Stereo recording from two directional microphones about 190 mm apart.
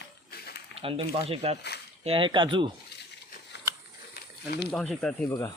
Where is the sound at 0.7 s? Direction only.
30° right (ahead or behind).